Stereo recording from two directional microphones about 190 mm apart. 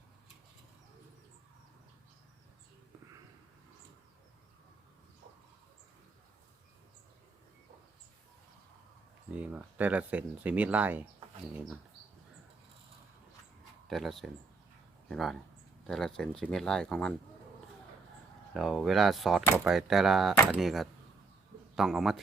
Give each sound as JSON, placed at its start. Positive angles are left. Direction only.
{"t": 9.3, "sound": "speech", "side_deg": -5}
{"t": 13.8, "sound": "speech", "side_deg": 0}
{"t": 18.5, "sound": "a man's voice", "side_deg": 0}